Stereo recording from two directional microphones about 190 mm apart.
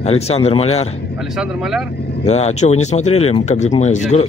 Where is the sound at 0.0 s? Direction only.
30° left (ahead or behind).